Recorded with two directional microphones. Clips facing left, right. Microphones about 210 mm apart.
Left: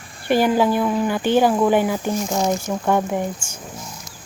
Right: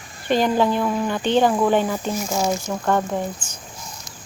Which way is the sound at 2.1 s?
Centre (ahead or behind).